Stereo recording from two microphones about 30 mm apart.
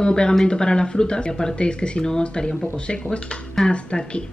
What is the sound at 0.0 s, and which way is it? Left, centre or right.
A woman's voice, left.